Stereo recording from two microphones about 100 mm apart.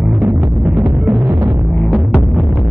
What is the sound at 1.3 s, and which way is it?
Music, 30° right (ahead or behind).